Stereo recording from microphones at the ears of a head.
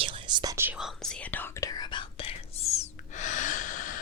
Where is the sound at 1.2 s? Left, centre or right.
Left.